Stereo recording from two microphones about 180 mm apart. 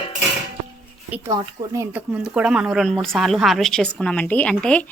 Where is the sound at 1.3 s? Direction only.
15° right (ahead or behind).